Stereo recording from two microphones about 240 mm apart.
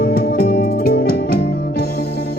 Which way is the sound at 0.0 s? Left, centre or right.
Left.